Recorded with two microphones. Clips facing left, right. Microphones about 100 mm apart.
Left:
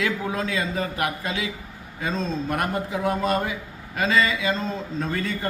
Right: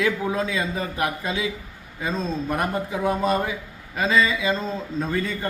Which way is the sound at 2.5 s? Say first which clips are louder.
Right 1 dB; 20° right (ahead or behind).